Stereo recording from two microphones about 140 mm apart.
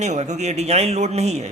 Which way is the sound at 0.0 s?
55° right (ahead or behind).